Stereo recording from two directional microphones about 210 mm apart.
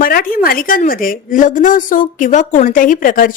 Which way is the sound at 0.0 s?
45° left (ahead or behind).